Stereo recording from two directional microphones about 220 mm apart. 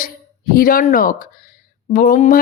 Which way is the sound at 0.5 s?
40° left (ahead or behind).